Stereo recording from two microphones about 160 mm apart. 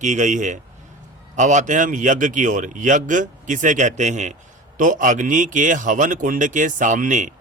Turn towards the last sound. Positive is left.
turn(degrees=-50)  # may be behind; listen again after turning